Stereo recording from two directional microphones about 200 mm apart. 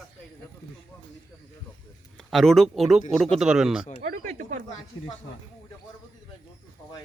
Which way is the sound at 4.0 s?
45° right (ahead or behind).